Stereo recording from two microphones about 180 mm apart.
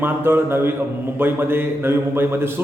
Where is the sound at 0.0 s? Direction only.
10° right (ahead or behind).